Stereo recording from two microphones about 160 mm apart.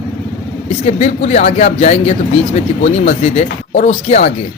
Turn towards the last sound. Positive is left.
turn(degrees=45)  # may be behind; listen again after turning